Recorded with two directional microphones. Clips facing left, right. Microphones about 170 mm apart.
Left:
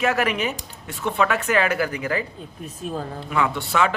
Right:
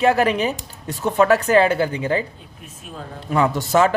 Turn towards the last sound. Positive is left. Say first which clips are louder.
# right 5 dB
turn(degrees=-40)  # may be behind; listen again after turning